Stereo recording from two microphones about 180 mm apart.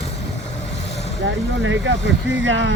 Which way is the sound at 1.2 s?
90° right.